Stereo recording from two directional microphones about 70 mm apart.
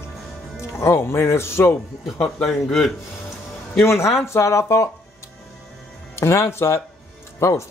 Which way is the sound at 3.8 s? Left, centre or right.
Left.